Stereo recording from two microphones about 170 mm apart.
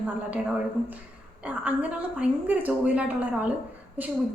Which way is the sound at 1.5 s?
10° right (ahead or behind).